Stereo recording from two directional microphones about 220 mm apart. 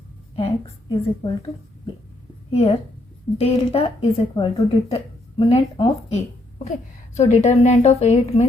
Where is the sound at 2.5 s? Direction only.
30° left (ahead or behind).